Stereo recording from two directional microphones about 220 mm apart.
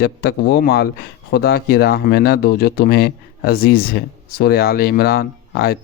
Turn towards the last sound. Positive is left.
turn(degrees=45)  # may be behind; listen again after turning